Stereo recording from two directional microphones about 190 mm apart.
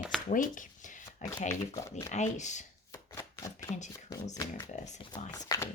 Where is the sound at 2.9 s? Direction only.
15° left (ahead or behind).